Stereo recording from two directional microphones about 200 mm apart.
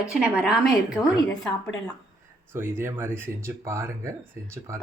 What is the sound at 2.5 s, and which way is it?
Speech, 10° right (ahead or behind).